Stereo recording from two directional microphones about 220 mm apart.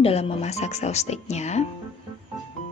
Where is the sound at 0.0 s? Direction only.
25° left (ahead or behind).